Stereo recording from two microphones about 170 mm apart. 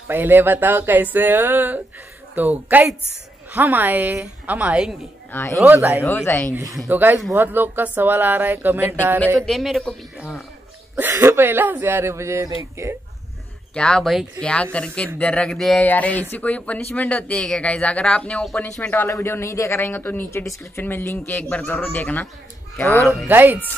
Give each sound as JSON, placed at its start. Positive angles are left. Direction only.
{"t": 0.1, "sound": "speech", "side_deg": -10}
{"t": 5.3, "sound": "speech", "side_deg": 15}
{"t": 5.6, "sound": "speech", "side_deg": -15}
{"t": 6.0, "sound": "speech", "side_deg": 10}
{"t": 6.9, "sound": "speech", "side_deg": -10}
{"t": 9.5, "sound": "a man's voice", "side_deg": 0}
{"t": 11.0, "sound": "speech", "side_deg": -15}
{"t": 13.7, "sound": "a man's voice", "side_deg": 5}
{"t": 23.2, "sound": "speech", "side_deg": -10}